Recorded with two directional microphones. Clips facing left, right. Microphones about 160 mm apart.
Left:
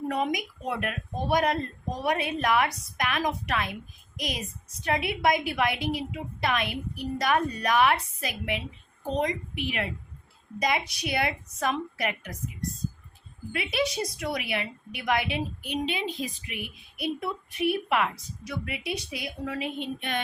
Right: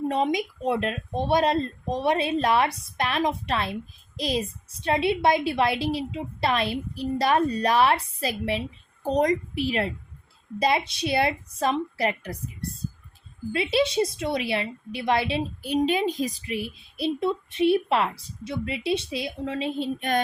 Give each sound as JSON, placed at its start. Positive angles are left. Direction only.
{"t": 0.1, "sound": "a woman's voice", "side_deg": -25}
{"t": 13.5, "sound": "a woman's voice", "side_deg": -30}